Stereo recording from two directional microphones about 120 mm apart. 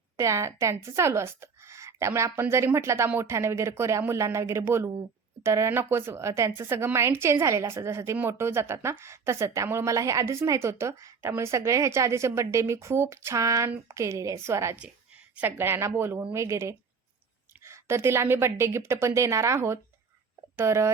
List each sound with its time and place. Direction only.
0.2 s speech: 25° right (ahead or behind)